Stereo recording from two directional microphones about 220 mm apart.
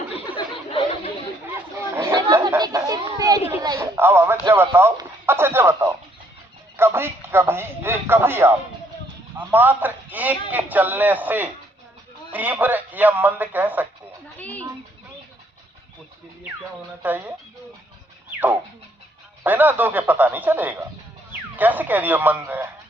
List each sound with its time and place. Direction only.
0.1 s a sound: 25° left (ahead or behind)
2.0 s chatter: 10° right (ahead or behind)
3.5 s a sound: 15° right (ahead or behind)
9.5 s speech: 10° right (ahead or behind)
14.3 s speech: 5° left (ahead or behind)
17.0 s speech: 10° right (ahead or behind)
19.4 s speech: 10° right (ahead or behind)